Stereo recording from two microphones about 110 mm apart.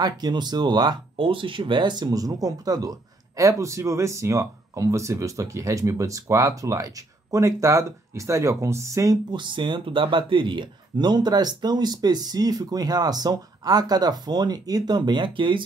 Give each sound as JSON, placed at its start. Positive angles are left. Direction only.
{"t": 0.0, "sound": "speech", "side_deg": -40}